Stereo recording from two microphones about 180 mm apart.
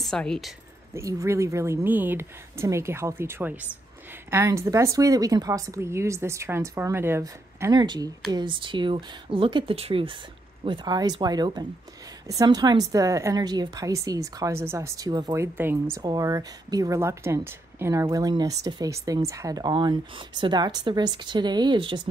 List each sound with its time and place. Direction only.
0.0 s speech: 5° left (ahead or behind)
0.9 s speech: 15° right (ahead or behind)